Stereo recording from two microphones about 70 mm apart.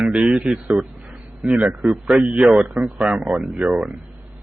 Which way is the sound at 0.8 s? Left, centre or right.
Centre.